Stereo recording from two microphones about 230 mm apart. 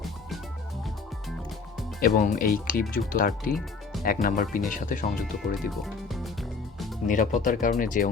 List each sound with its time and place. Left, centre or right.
2.0 s speech: left
5.5 s speech: centre
7.1 s speech: left